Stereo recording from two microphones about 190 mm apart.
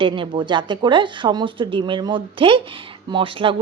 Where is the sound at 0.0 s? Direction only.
25° right (ahead or behind).